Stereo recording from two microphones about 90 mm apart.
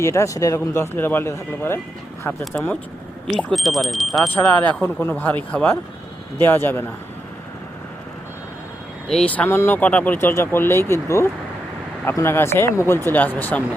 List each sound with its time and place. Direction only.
0.0 s speech: 35° left (ahead or behind)
3.2 s speech: centre (ahead or behind)
4.4 s speech: 20° left (ahead or behind)
9.0 s speech: 5° left (ahead or behind)
9.5 s speech: 25° left (ahead or behind)
13.1 s speech: 20° left (ahead or behind)